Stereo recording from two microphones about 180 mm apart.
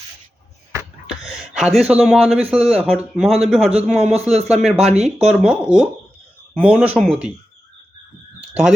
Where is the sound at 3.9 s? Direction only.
35° right (ahead or behind).